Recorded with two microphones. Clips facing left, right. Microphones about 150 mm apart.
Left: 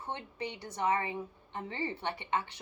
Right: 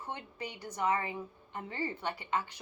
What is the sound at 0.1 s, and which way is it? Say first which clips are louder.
A woman's voice: left 3 dB; 25° left (ahead or behind).